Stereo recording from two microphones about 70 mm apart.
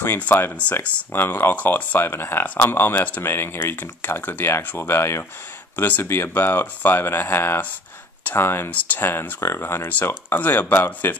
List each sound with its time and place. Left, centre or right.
0.0 s speech: left
8.7 s speech: left